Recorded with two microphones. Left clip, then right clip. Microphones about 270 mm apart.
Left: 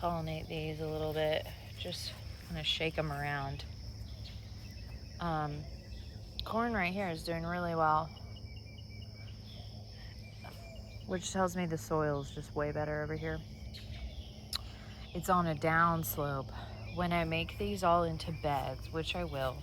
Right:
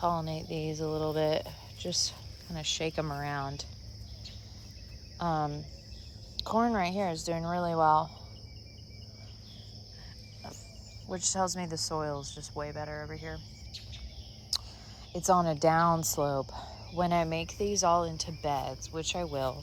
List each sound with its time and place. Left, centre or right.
0.0 s speech: centre
5.2 s speech: centre
11.1 s speech: centre
14.5 s a sound: centre
15.1 s speech: centre